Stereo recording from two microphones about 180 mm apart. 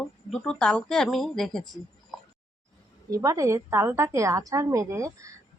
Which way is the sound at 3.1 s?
20° right (ahead or behind).